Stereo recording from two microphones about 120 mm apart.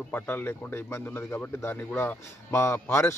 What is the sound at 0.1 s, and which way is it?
Speech, 20° left (ahead or behind).